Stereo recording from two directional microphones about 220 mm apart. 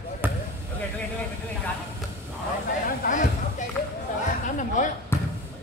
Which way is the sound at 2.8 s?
40° left (ahead or behind).